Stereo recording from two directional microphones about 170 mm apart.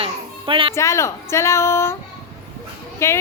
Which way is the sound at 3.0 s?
15° left (ahead or behind).